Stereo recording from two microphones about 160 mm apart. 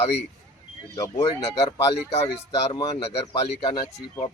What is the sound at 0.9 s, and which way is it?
Speech, 20° left (ahead or behind).